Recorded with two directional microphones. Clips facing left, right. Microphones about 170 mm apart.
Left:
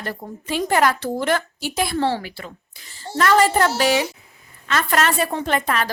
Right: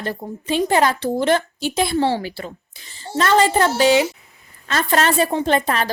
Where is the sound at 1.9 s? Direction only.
10° right (ahead or behind).